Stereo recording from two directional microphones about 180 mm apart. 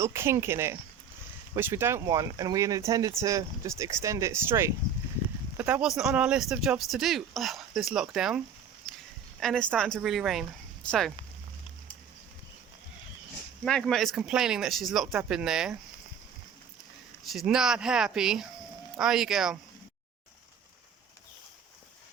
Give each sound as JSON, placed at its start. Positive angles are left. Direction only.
{"t": 0.0, "sound": "speech", "side_deg": -15}
{"t": 8.9, "sound": "walk", "side_deg": 0}
{"t": 9.4, "sound": "speech", "side_deg": 5}
{"t": 13.7, "sound": "speech", "side_deg": 5}
{"t": 17.3, "sound": "speech", "side_deg": -5}